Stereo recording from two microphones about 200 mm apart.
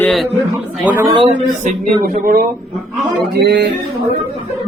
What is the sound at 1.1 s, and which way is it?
Speech, 35° right (ahead or behind).